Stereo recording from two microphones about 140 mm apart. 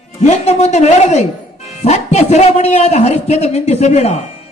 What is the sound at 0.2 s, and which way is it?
A man's voice, 55° left (ahead or behind).